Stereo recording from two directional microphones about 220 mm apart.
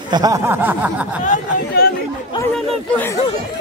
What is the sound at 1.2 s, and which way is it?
Speech, 45° left (ahead or behind).